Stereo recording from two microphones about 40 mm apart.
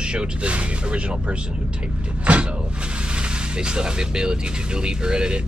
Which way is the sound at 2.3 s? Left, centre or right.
Right.